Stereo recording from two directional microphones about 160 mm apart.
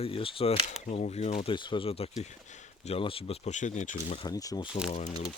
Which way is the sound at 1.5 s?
30° left (ahead or behind).